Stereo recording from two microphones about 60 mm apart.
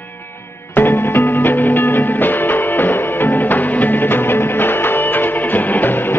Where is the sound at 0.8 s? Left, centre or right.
Left.